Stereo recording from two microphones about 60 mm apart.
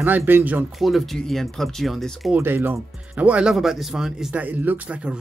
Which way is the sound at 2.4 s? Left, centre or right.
Right.